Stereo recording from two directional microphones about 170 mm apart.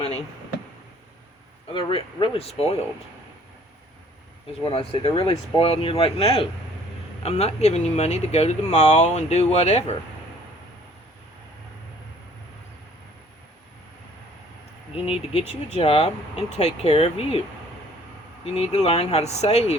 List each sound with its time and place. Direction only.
1.7 s speech: 30° left (ahead or behind)
4.6 s speech: 35° left (ahead or behind)
14.9 s speech: 35° left (ahead or behind)
18.4 s speech: 40° left (ahead or behind)